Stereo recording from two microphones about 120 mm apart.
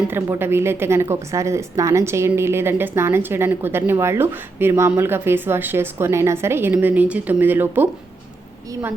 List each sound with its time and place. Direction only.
0.1 s a woman's voice: 20° right (ahead or behind)